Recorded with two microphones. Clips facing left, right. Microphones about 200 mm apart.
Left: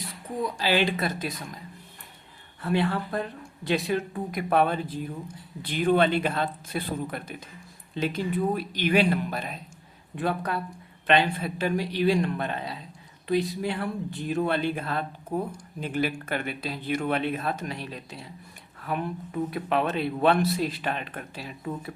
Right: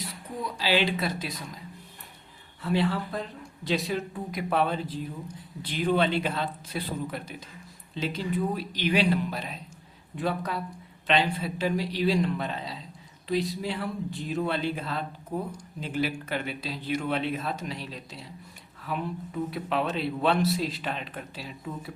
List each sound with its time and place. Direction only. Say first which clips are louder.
0.5 s speech: even; 50° left (ahead or behind)
2.6 s a man's voice: left 1 dB; 55° left (ahead or behind)